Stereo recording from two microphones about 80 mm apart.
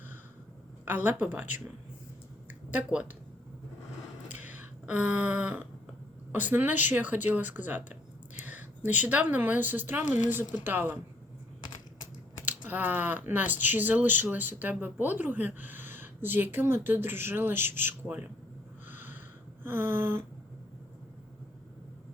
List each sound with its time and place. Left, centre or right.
0.9 s speech: right
2.6 s speech: centre
4.3 s a sound: right
6.3 s speech: right
12.5 s speech: right
18.9 s snort: right
19.6 s speech: right